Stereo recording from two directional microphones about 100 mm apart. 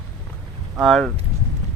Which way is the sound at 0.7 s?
5° left (ahead or behind).